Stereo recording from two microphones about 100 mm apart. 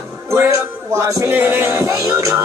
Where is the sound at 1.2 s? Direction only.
20° right (ahead or behind).